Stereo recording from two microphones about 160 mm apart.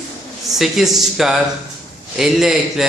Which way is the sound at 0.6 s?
Centre (ahead or behind).